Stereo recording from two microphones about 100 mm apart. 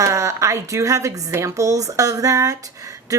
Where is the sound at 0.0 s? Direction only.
30° right (ahead or behind).